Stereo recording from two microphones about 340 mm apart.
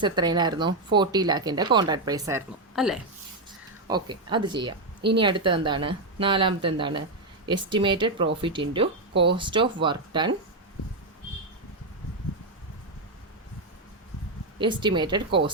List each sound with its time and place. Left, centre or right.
0.0 s speech: centre
3.8 s speech: centre
9.1 s speech: right
9.4 s speech: centre
14.6 s speech: centre